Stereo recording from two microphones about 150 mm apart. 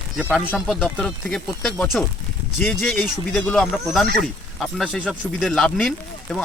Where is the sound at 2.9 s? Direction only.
Centre (ahead or behind).